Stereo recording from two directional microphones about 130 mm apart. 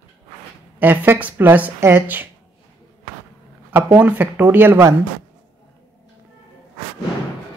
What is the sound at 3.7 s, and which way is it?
A woman's voice, 15° right (ahead or behind).